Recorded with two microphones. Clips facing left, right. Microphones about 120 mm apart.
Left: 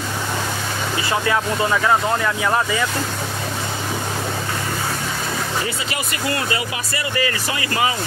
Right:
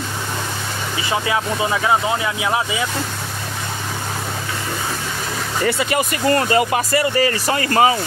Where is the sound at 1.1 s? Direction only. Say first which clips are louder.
Even; 15° right (ahead or behind).